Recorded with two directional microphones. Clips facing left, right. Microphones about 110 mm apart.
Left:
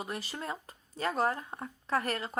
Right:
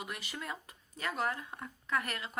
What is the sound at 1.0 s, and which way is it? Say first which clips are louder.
Speech: left 5 dB; 35° left (ahead or behind).